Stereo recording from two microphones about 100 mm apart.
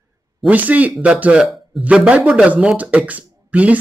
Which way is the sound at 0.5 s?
15° right (ahead or behind).